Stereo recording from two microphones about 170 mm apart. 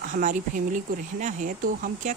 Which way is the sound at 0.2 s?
50° right (ahead or behind).